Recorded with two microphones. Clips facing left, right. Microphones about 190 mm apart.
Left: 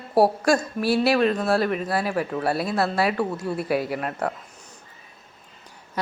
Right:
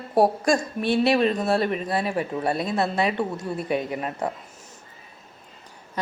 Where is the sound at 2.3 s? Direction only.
20° right (ahead or behind).